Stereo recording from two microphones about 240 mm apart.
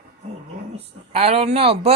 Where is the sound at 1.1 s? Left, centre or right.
Right.